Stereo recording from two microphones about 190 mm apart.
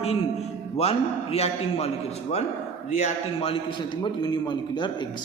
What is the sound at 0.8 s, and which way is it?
A man's voice, 30° left (ahead or behind).